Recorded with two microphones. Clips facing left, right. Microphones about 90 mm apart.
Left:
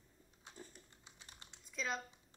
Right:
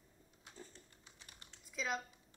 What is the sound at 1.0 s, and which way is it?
Typing, 25° left (ahead or behind).